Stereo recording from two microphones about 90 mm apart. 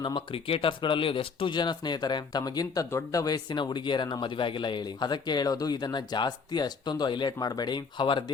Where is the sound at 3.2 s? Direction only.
50° left (ahead or behind).